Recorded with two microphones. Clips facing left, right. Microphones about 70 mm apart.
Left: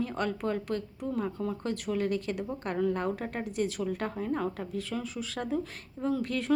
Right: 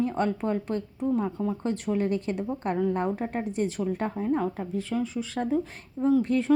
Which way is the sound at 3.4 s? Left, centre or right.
Right.